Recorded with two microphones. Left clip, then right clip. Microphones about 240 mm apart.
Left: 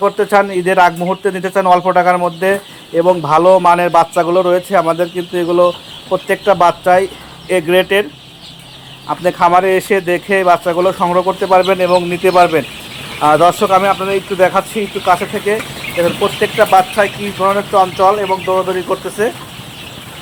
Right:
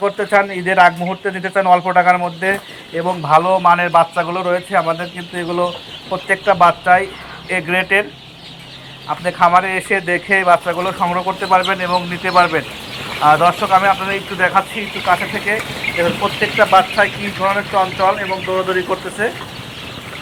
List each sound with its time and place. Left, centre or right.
0.0 s speech: centre
9.0 s speech: left